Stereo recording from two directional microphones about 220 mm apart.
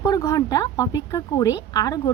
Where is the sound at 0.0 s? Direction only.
15° left (ahead or behind).